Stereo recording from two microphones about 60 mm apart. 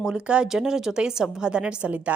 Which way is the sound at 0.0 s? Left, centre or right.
Centre.